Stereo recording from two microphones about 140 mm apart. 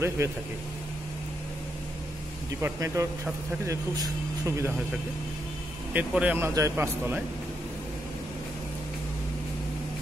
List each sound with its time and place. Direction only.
0.2 s speech: 20° right (ahead or behind)
2.6 s speech: 20° right (ahead or behind)
5.9 s speech: 10° right (ahead or behind)